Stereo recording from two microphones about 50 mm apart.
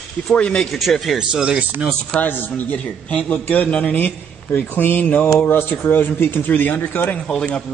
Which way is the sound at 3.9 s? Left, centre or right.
Left.